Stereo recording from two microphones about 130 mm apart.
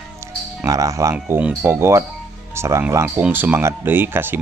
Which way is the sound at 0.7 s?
25° right (ahead or behind).